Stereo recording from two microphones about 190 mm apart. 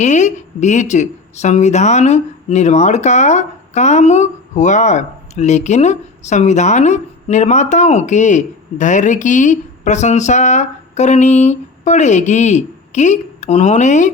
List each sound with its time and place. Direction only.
0.0 s a woman's voice: 40° left (ahead or behind)